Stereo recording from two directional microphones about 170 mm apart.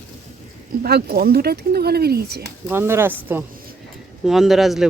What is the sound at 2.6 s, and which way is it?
Speech, 15° right (ahead or behind).